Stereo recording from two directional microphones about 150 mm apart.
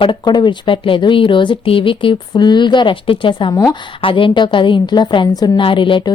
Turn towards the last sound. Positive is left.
turn(degrees=35)  # may be behind; listen again after turning